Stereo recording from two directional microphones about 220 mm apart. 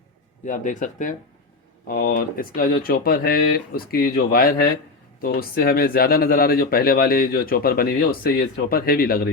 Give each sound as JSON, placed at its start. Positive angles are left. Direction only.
{"t": 0.4, "sound": "speech", "side_deg": 35}